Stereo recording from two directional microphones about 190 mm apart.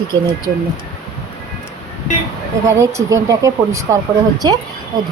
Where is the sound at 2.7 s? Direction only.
15° right (ahead or behind).